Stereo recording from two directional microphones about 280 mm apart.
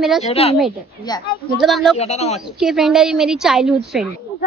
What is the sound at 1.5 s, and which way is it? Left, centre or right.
Speech, centre.